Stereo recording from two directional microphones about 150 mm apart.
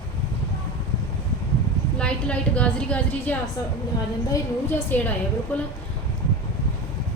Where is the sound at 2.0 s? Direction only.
5° left (ahead or behind).